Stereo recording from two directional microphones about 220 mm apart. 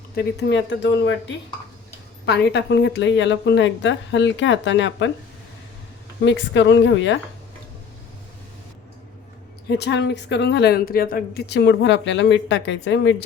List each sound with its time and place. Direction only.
0.1 s speech: 45° left (ahead or behind)
6.2 s speech: 55° left (ahead or behind)
9.6 s speech: 50° left (ahead or behind)